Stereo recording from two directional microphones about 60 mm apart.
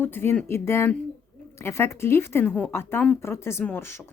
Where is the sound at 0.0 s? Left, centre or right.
Left.